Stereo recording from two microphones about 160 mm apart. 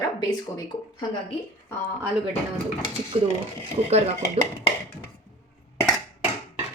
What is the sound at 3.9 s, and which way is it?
Speech, 40° right (ahead or behind).